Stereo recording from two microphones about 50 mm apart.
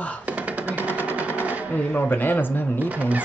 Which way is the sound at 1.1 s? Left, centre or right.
Right.